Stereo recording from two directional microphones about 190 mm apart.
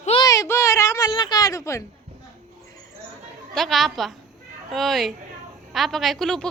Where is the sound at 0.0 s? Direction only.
30° left (ahead or behind).